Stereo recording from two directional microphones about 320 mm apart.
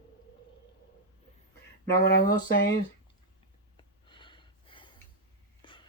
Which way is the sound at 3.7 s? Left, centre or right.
Centre.